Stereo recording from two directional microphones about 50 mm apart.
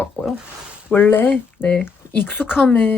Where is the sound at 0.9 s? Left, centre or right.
Left.